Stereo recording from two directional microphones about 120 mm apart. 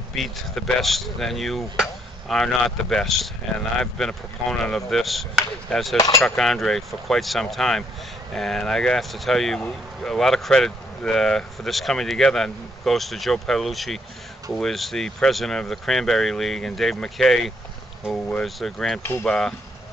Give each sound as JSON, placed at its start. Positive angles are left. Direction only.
{"t": 0.1, "sound": "speech", "side_deg": 0}
{"t": 5.9, "sound": "a sound", "side_deg": 25}
{"t": 6.2, "sound": "speech", "side_deg": 5}